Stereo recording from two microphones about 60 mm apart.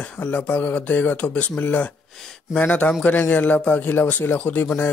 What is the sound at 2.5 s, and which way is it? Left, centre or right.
A man's voice, left.